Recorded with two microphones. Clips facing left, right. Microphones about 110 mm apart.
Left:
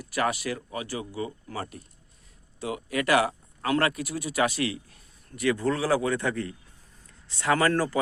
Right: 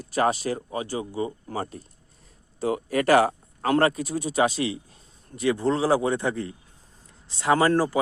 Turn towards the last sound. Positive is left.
turn(degrees=-20)  # may be behind; listen again after turning